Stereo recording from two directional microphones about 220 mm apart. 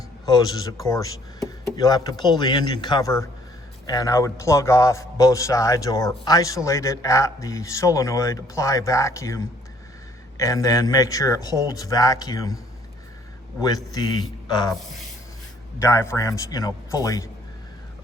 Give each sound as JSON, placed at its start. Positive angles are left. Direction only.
{"t": 0.3, "sound": "a man's voice", "side_deg": 20}
{"t": 13.9, "sound": "a man's voice", "side_deg": 20}
{"t": 15.8, "sound": "a man's voice", "side_deg": 15}